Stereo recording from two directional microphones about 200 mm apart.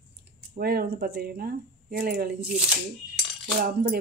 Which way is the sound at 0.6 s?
50° right (ahead or behind).